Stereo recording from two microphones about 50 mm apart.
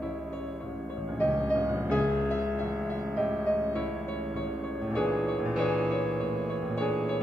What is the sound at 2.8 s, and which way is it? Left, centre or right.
Music, centre.